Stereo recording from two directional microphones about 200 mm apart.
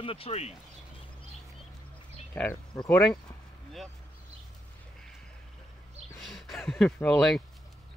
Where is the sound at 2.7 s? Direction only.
20° left (ahead or behind).